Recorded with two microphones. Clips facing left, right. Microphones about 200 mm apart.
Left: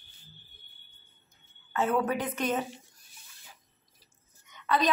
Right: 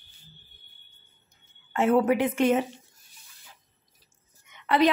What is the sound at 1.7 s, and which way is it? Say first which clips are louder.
Speech: right 6 dB; 25° right (ahead or behind).